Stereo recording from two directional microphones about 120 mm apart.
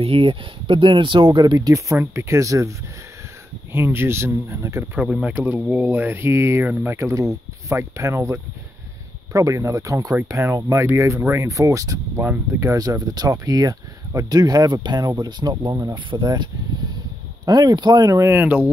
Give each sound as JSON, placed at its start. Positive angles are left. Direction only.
{"t": 0.0, "sound": "speech", "side_deg": -50}
{"t": 3.7, "sound": "speech", "side_deg": -20}
{"t": 5.0, "sound": "speech", "side_deg": -5}
{"t": 17.5, "sound": "speech", "side_deg": -35}